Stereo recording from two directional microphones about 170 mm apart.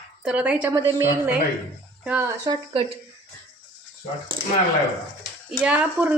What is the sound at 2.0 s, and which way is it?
Speech, 5° right (ahead or behind).